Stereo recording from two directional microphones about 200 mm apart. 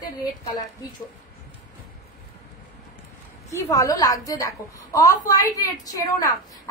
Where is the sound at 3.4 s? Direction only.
15° left (ahead or behind).